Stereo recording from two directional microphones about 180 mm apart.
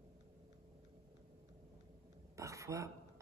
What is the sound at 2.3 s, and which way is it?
Speech, 15° right (ahead or behind).